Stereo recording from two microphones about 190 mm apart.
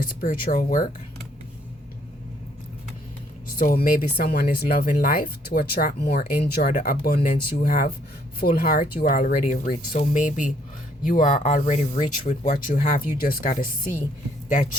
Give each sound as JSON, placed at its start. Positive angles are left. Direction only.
{"t": 0.0, "sound": "speech", "side_deg": 45}
{"t": 3.6, "sound": "speech", "side_deg": 50}